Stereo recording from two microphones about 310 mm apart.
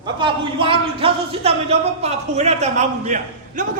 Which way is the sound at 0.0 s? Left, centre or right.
Centre.